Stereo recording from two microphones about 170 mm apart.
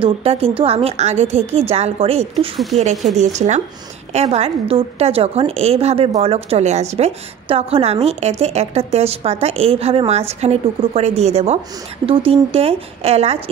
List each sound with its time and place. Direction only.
0.0 s a woman's voice: 35° right (ahead or behind)
3.3 s a woman's voice: 45° right (ahead or behind)